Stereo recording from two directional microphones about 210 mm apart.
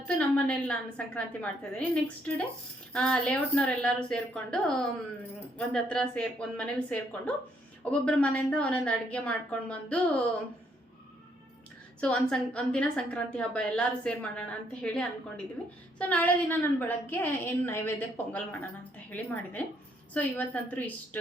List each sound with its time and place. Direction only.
0.1 s a woman's voice: 5° left (ahead or behind)
11.9 s a woman's voice: 5° left (ahead or behind)